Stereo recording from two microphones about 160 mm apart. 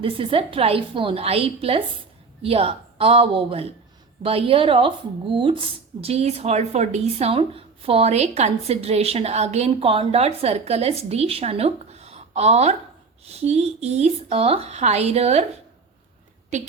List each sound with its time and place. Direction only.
0.0 s speech: 35° right (ahead or behind)
16.5 s a woman's voice: 45° right (ahead or behind)